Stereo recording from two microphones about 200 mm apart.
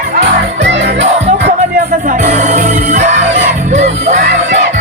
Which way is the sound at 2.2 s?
35° right (ahead or behind).